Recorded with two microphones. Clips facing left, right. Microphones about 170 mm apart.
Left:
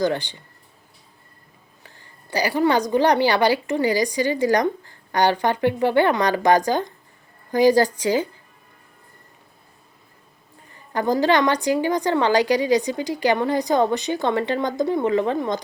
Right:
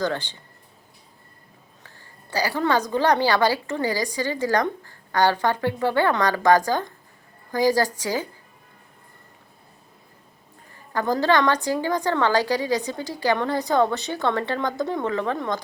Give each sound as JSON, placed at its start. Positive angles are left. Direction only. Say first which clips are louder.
{"t": 0.0, "sound": "a woman's voice", "louder": "left 4 dB", "side_deg": 15}
{"t": 2.3, "sound": "a woman's voice", "louder": "left 3 dB", "side_deg": 15}
{"t": 10.9, "sound": "a woman's voice", "louder": "left 2 dB", "side_deg": 15}